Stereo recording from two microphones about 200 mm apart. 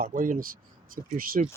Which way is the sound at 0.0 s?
40° right (ahead or behind).